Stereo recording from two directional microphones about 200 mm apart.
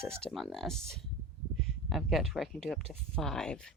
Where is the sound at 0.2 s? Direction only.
Centre (ahead or behind).